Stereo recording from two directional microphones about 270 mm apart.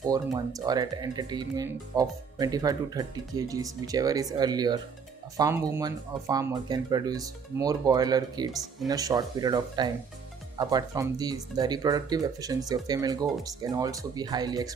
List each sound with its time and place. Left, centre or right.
0.1 s speech: centre